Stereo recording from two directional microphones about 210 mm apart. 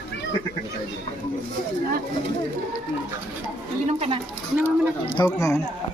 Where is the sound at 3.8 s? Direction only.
30° right (ahead or behind).